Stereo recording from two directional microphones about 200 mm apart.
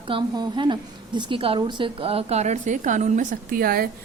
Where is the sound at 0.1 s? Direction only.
25° right (ahead or behind).